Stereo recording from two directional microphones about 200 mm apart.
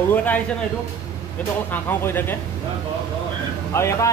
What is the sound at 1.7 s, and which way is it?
Speech, 10° left (ahead or behind).